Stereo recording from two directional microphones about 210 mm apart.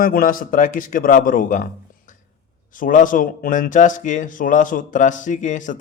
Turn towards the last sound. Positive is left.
turn(degrees=35)  # may be behind; listen again after turning